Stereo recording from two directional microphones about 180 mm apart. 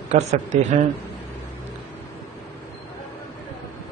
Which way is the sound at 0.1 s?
40° right (ahead or behind).